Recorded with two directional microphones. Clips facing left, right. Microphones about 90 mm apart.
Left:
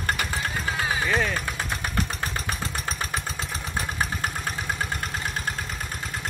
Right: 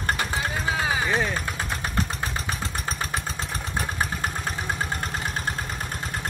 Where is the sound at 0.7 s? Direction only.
20° right (ahead or behind).